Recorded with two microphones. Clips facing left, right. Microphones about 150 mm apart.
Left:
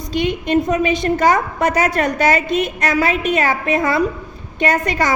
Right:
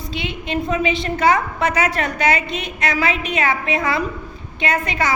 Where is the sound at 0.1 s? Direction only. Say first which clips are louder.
Left 9 dB; 45° left (ahead or behind).